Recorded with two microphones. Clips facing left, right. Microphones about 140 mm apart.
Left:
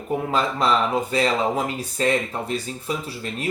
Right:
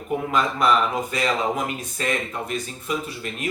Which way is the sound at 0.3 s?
30° left (ahead or behind).